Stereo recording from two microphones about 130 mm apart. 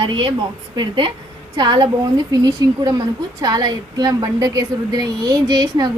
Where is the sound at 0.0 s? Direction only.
40° right (ahead or behind).